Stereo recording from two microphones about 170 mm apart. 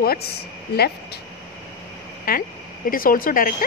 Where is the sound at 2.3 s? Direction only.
55° left (ahead or behind).